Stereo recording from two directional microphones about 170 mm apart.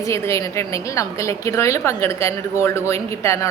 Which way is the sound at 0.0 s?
15° left (ahead or behind).